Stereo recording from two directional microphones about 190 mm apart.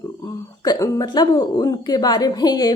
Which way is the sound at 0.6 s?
20° left (ahead or behind).